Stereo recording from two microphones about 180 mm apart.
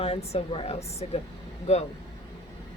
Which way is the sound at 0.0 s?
35° left (ahead or behind).